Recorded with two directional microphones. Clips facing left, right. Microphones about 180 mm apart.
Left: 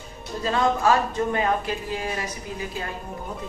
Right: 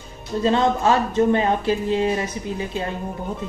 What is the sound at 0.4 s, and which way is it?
Speech, 25° right (ahead or behind).